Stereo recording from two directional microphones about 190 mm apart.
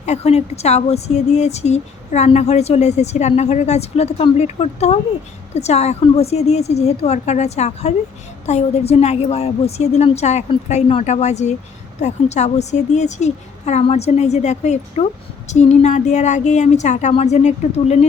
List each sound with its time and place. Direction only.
0.0 s speech: 35° left (ahead or behind)